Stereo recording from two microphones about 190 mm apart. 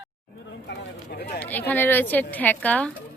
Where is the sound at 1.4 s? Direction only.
10° left (ahead or behind).